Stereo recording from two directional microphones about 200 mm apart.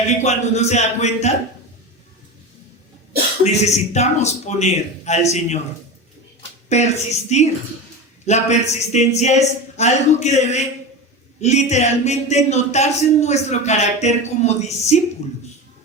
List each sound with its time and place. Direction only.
0.2 s speech: 35° left (ahead or behind)
3.4 s speech: 35° left (ahead or behind)
6.7 s speech: 35° left (ahead or behind)